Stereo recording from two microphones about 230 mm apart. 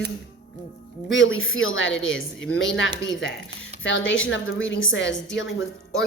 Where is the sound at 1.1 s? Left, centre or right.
Left.